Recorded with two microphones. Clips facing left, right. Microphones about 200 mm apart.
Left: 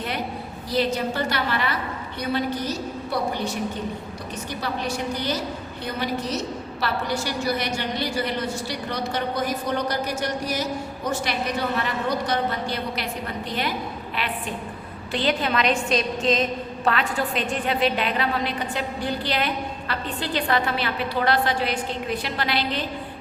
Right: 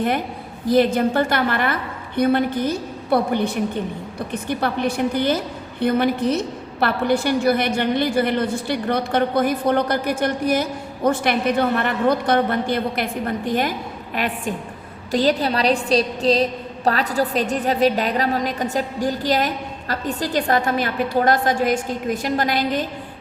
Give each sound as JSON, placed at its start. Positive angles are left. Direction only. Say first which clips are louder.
{"t": 0.7, "sound": "a woman's voice", "louder": "right 7 dB", "side_deg": -50}